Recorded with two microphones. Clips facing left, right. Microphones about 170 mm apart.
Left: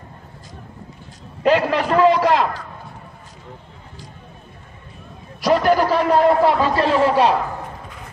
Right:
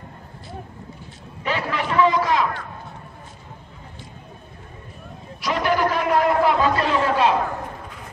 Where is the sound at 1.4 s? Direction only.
40° left (ahead or behind).